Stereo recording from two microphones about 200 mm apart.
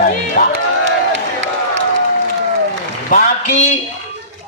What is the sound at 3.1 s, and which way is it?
Speech, 35° left (ahead or behind).